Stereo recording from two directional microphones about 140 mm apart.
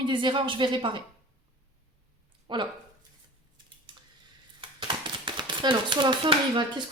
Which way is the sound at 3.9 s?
35° right (ahead or behind).